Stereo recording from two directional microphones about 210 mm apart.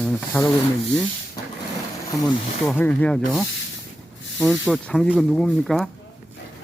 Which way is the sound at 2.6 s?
5° left (ahead or behind).